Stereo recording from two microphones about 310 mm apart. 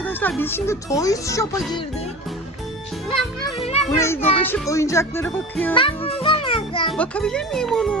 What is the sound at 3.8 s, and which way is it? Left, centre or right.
A child's voice, centre.